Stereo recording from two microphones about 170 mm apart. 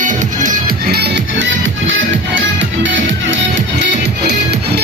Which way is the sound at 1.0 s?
90° right.